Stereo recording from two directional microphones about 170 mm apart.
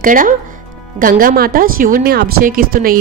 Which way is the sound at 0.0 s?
55° right (ahead or behind).